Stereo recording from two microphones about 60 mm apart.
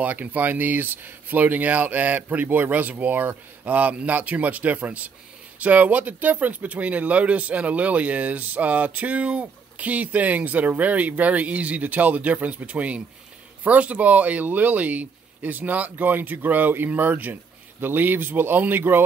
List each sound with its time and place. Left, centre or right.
0.0 s speech: right